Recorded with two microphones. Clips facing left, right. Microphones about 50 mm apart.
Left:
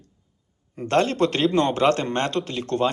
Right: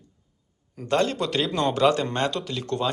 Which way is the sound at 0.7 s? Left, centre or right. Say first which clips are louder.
Left 3 dB; left.